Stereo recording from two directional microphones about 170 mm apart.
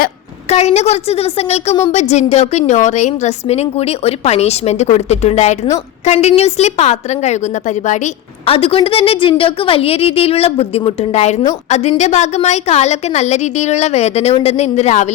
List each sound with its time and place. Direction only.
0.4 s a woman's voice: 40° left (ahead or behind)